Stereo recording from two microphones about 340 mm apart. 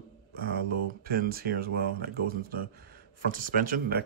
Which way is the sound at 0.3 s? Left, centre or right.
Right.